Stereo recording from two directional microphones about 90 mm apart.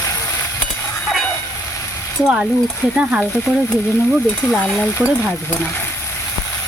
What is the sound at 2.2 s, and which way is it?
Speech, 10° right (ahead or behind).